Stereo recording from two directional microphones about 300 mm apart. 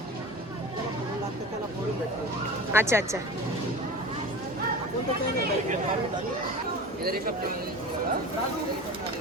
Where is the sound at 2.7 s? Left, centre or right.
Centre.